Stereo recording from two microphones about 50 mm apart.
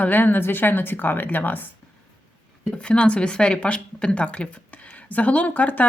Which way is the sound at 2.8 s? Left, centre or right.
Left.